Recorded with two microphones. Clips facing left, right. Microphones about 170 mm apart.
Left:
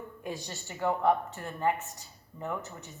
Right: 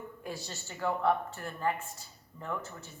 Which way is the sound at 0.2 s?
15° left (ahead or behind).